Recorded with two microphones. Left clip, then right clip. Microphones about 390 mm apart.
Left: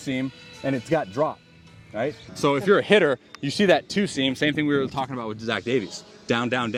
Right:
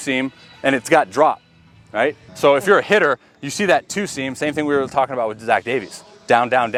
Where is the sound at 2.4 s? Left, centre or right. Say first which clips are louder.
Right 7 dB; right.